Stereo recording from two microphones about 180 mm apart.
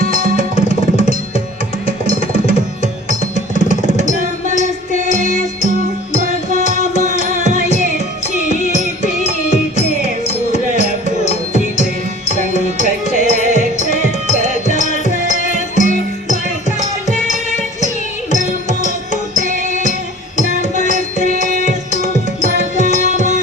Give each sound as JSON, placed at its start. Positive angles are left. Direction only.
{"t": 0.2, "sound": "music", "side_deg": -45}
{"t": 2.0, "sound": "music", "side_deg": 35}
{"t": 4.1, "sound": "music", "side_deg": -45}
{"t": 9.2, "sound": "music", "side_deg": 40}
{"t": 13.1, "sound": "music", "side_deg": -45}
{"t": 14.7, "sound": "music", "side_deg": 40}
{"t": 17.7, "sound": "music", "side_deg": 40}
{"t": 19.4, "sound": "music", "side_deg": -45}
{"t": 20.9, "sound": "music", "side_deg": -45}
{"t": 23.0, "sound": "music", "side_deg": -40}